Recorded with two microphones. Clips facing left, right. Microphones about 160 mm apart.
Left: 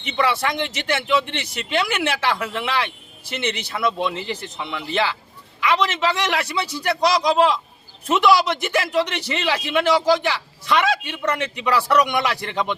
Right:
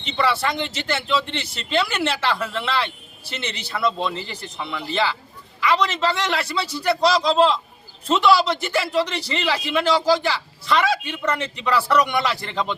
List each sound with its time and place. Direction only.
0.0 s a man's voice: 15° left (ahead or behind)
11.5 s a man's voice: 15° left (ahead or behind)